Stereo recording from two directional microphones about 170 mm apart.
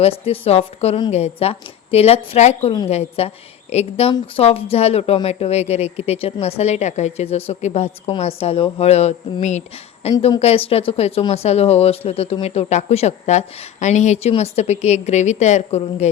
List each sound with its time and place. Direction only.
0.0 s speech: 35° left (ahead or behind)